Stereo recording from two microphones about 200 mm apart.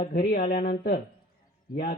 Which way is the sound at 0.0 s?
45° left (ahead or behind).